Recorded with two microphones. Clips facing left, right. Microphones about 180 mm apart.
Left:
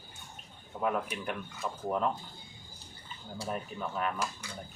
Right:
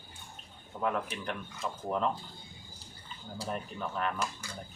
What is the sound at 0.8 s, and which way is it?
Speech, 10° left (ahead or behind).